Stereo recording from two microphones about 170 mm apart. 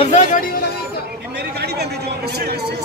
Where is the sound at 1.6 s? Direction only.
75° right (ahead or behind).